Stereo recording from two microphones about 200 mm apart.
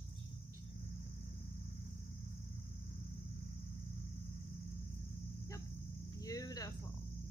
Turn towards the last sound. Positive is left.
turn(degrees=20)  # may be behind; listen again after turning